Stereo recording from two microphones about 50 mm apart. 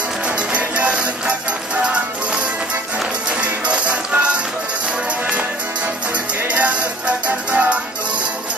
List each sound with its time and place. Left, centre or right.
0.4 s music: right
6.4 s music: right